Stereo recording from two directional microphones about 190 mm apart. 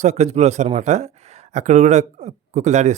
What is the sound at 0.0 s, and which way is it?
Speech, 35° right (ahead or behind).